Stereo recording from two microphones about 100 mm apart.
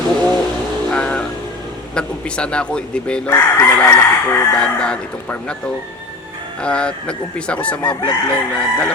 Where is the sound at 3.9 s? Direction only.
25° left (ahead or behind).